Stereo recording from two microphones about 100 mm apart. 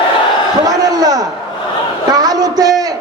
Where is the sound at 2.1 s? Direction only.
40° right (ahead or behind).